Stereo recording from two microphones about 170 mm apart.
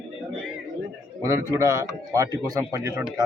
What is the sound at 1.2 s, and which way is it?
Speech, 20° right (ahead or behind).